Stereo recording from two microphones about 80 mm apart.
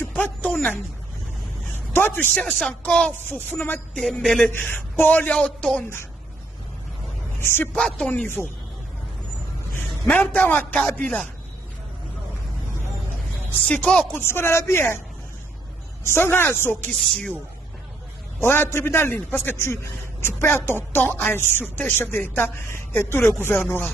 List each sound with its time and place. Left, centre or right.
0.0 s a sound: left
2.8 s speech: centre
3.3 s a woman's voice: left
4.0 s speech: centre
4.5 s a woman's voice: left
7.3 s speech: left
7.7 s speech: centre
10.0 s a woman's voice: centre
13.5 s speech: centre
14.1 s a woman's voice: left
16.0 s a woman's voice: left
18.4 s a woman's voice: left
19.5 s a woman's voice: left